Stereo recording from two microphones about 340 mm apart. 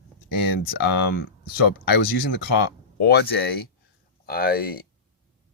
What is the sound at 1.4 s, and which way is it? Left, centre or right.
Speech, left.